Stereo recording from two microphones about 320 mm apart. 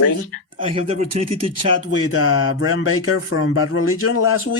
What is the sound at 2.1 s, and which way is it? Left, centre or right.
Speech, left.